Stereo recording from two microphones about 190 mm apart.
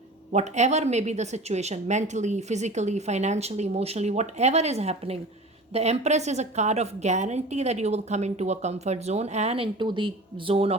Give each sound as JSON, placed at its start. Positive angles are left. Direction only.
{"t": 0.3, "sound": "a woman's voice", "side_deg": -35}